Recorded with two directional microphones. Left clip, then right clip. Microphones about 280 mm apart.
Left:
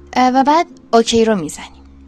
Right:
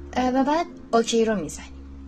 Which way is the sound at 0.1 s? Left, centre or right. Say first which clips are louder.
Left 10 dB; left.